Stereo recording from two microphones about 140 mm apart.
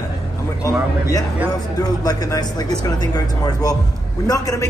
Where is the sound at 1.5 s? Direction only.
25° left (ahead or behind).